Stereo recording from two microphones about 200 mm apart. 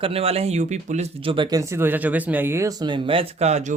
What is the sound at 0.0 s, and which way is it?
A man's voice, 30° right (ahead or behind).